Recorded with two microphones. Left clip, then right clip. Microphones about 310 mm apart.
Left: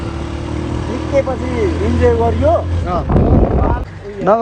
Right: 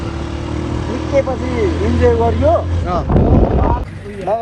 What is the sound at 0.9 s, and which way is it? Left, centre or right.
Speech, centre.